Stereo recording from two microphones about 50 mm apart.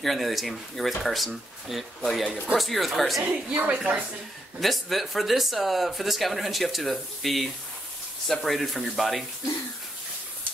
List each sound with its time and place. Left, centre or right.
0.0 s speech: centre
3.2 s a woman's voice: right
4.6 s speech: centre